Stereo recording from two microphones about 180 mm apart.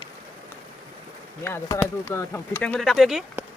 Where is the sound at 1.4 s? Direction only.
15° left (ahead or behind).